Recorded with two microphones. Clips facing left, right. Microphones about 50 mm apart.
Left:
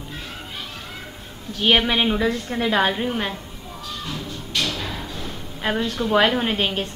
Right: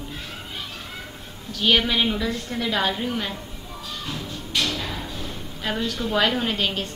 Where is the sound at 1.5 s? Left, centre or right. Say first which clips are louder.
Left 2 dB; left.